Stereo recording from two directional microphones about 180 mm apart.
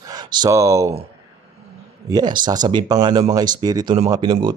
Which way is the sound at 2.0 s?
20° right (ahead or behind).